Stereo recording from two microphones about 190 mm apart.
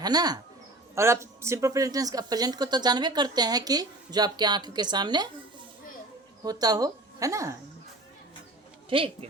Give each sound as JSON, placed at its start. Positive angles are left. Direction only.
{"t": 0.0, "sound": "speech", "side_deg": -20}
{"t": 8.9, "sound": "speech", "side_deg": -25}